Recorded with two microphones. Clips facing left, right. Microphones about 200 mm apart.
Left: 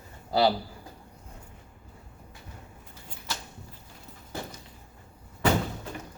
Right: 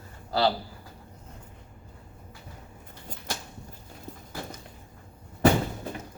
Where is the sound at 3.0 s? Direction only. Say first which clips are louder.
Right 2 dB; 50° right (ahead or behind).